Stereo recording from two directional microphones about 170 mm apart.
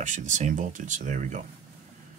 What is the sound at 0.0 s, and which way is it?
Speech, 45° right (ahead or behind).